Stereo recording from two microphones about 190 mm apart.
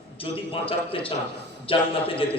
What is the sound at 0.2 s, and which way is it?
A man's voice, 30° left (ahead or behind).